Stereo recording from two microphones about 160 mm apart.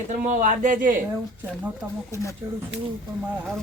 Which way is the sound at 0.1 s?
55° right (ahead or behind).